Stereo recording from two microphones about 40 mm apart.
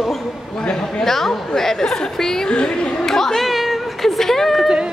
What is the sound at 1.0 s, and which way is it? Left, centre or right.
Chatter, centre.